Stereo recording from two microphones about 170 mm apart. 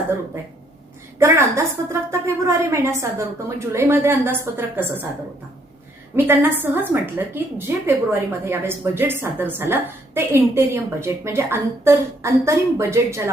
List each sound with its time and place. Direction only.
1.2 s a woman's voice: 15° right (ahead or behind)
6.1 s a woman's voice: 10° right (ahead or behind)